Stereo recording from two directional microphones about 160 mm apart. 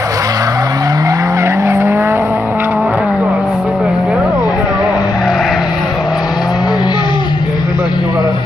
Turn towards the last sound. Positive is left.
turn(degrees=30)  # may be behind; listen again after turning